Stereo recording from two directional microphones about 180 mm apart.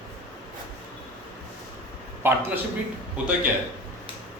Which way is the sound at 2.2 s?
15° right (ahead or behind).